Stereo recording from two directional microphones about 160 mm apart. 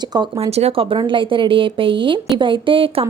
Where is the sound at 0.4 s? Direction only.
40° right (ahead or behind).